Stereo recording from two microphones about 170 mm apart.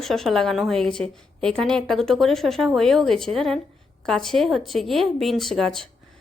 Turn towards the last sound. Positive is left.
turn(degrees=0)  # may be behind; listen again after turning